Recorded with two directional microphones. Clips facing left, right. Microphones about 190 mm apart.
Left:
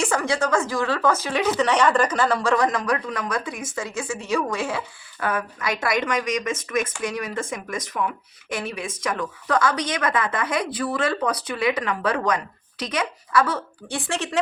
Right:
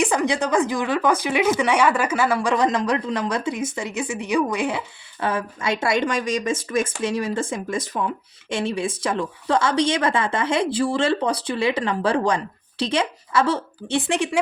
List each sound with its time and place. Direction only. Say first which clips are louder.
0.0 s a woman's voice: right 2 dB; 15° right (ahead or behind)